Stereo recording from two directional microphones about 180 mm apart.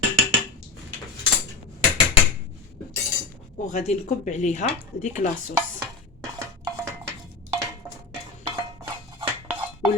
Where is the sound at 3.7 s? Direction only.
35° left (ahead or behind).